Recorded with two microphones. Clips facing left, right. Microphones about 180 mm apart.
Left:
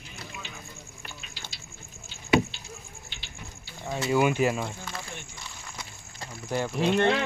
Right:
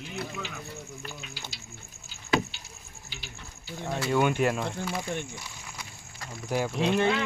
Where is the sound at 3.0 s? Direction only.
5° right (ahead or behind).